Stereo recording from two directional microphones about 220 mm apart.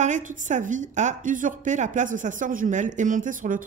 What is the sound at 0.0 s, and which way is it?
A woman's voice, 35° right (ahead or behind).